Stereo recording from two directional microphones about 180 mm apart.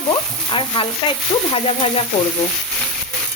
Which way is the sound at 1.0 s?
25° left (ahead or behind).